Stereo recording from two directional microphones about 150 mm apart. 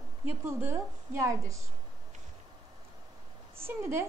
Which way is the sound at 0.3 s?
15° right (ahead or behind).